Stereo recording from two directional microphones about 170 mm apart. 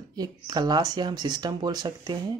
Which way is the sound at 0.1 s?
20° right (ahead or behind).